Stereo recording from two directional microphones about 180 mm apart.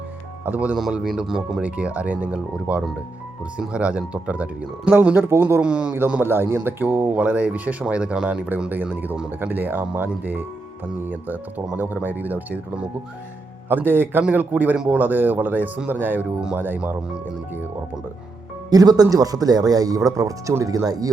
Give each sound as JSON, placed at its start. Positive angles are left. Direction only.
{"t": 0.4, "sound": "a man's voice", "side_deg": -10}
{"t": 18.7, "sound": "speech", "side_deg": -20}